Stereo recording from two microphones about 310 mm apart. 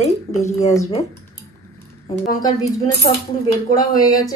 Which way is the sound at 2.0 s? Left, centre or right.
Left.